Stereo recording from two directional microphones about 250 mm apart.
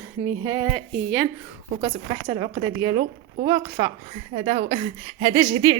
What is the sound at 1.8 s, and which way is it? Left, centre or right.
Speech, centre.